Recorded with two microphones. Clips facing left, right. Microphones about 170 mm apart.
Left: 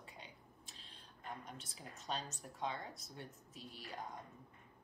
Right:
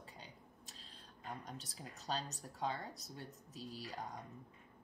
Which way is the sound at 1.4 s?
35° right (ahead or behind).